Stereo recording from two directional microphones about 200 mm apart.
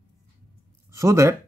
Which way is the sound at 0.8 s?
15° right (ahead or behind).